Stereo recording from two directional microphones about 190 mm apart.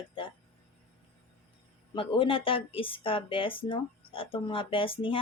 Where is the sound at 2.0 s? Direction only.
25° left (ahead or behind).